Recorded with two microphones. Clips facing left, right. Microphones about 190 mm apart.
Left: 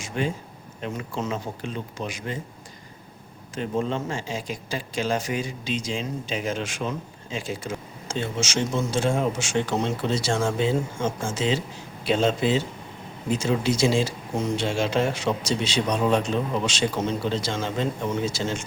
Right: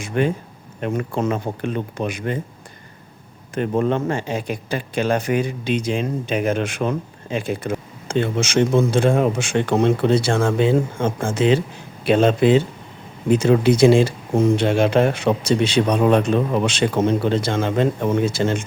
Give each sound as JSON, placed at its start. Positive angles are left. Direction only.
{"t": 0.0, "sound": "speech", "side_deg": -60}
{"t": 3.5, "sound": "speech", "side_deg": -60}